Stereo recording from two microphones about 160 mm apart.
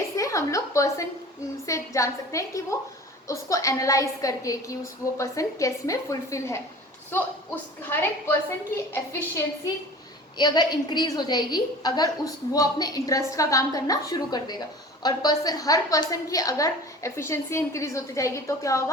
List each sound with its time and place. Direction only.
0.2 s a woman's voice: 20° left (ahead or behind)
10.3 s a woman's voice: 25° left (ahead or behind)